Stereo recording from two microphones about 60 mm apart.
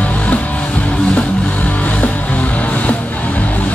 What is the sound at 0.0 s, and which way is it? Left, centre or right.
Music, left.